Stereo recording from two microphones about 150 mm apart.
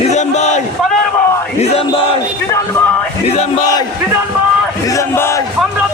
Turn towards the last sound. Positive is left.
turn(degrees=15)  # may be behind; listen again after turning